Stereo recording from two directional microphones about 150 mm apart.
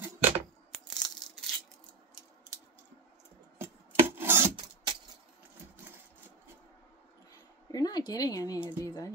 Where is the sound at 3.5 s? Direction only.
15° right (ahead or behind).